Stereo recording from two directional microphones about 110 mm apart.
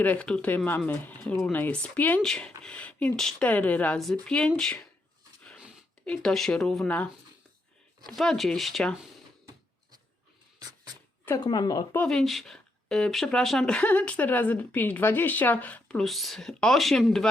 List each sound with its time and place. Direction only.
0.0 s speech: 15° left (ahead or behind)
1.2 s speech: 5° left (ahead or behind)
6.1 s speech: 5° left (ahead or behind)
8.1 s speech: 5° left (ahead or behind)
11.3 s speech: 40° left (ahead or behind)
12.0 s speech: centre (ahead or behind)
16.0 s speech: centre (ahead or behind)